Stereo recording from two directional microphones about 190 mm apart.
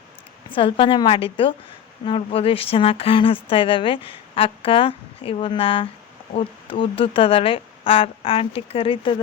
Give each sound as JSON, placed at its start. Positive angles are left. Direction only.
{"t": 0.5, "sound": "a woman's voice", "side_deg": 25}